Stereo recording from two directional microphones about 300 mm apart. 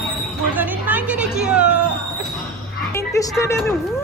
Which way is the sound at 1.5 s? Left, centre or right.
Left.